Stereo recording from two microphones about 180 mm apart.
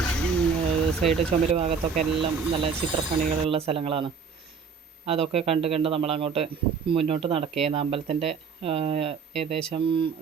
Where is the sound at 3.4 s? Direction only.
30° right (ahead or behind).